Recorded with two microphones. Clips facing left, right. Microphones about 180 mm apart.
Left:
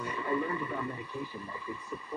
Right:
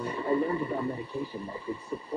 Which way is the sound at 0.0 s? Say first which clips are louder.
Right 5 dB; 35° right (ahead or behind).